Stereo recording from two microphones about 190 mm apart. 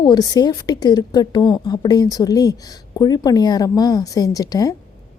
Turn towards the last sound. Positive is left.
turn(degrees=20)  # may be behind; listen again after turning